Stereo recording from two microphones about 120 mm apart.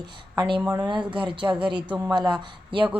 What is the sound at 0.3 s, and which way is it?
A woman's voice, 40° right (ahead or behind).